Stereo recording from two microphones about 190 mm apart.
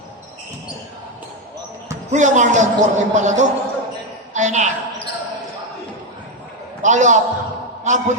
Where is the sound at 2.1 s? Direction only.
40° right (ahead or behind).